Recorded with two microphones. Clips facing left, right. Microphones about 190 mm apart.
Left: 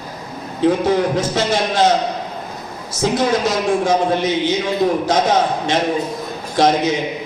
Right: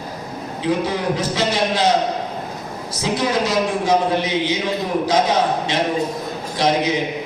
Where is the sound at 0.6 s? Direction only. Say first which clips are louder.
Left 5 dB; 50° left (ahead or behind).